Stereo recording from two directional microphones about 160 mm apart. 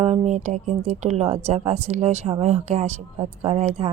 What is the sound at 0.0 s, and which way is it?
A woman's voice, 45° right (ahead or behind).